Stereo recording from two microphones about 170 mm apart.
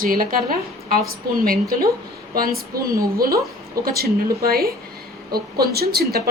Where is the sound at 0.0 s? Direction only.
55° right (ahead or behind).